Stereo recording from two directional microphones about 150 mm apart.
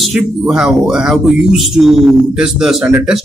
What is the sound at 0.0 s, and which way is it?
Speech, centre (ahead or behind).